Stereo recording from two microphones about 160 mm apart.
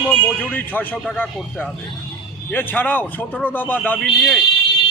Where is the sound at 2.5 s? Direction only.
10° left (ahead or behind).